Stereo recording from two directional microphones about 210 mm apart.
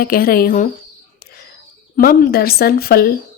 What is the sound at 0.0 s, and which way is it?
Speech, 45° left (ahead or behind).